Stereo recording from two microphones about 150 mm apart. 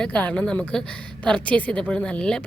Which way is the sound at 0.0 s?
5° left (ahead or behind).